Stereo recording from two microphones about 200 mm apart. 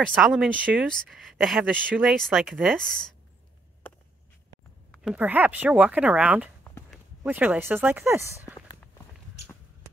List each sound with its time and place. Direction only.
0.0 s speech: centre (ahead or behind)
4.9 s speech: 5° right (ahead or behind)
6.6 s a sound: 10° left (ahead or behind)
7.2 s speech: 10° right (ahead or behind)
8.5 s walk: 20° left (ahead or behind)